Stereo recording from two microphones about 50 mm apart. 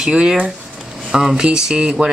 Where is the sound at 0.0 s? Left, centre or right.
Centre.